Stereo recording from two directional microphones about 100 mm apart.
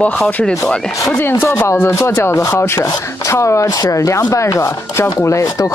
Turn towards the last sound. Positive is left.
turn(degrees=30)  # may be behind; listen again after turning